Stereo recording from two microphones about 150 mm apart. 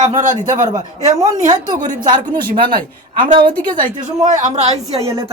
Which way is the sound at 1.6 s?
60° right (ahead or behind).